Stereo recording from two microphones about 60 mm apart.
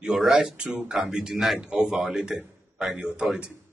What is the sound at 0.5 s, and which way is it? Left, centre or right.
A man's voice, centre.